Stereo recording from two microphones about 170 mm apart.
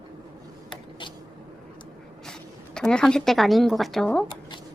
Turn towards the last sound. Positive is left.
turn(degrees=5)  # may be behind; listen again after turning